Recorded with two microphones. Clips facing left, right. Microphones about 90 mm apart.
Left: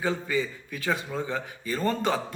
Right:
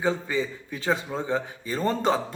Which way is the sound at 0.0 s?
25° right (ahead or behind).